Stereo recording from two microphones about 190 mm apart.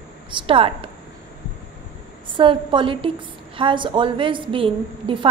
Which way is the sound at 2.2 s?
25° right (ahead or behind).